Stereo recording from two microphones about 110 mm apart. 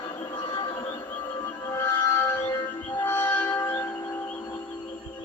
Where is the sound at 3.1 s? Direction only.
15° left (ahead or behind).